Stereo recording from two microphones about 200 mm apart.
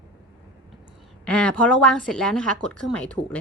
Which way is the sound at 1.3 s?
5° left (ahead or behind).